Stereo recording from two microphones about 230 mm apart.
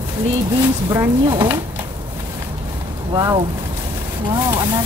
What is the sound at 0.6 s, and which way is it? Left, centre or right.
A woman's voice, centre.